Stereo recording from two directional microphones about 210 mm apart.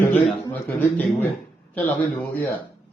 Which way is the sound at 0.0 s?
10° left (ahead or behind).